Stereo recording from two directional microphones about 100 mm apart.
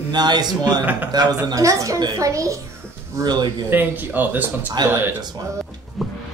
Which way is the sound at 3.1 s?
45° right (ahead or behind).